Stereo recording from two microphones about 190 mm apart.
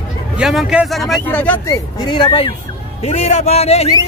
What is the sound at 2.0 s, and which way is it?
A man's voice, 25° left (ahead or behind).